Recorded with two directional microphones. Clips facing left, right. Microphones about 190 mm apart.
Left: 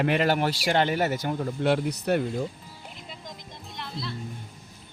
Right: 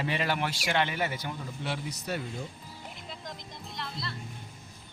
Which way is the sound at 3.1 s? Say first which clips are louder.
Even; centre (ahead or behind).